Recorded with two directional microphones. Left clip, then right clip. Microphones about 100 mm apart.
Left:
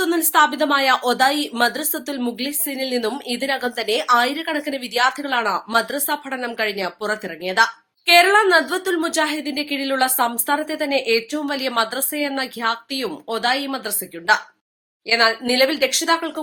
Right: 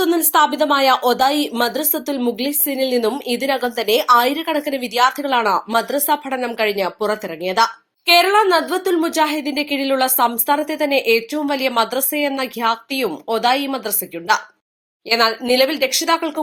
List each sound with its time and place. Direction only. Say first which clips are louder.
0.0 s a woman's voice: right 1 dB; 20° right (ahead or behind)